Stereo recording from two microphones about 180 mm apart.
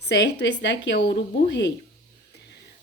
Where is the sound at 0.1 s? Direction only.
75° left (ahead or behind).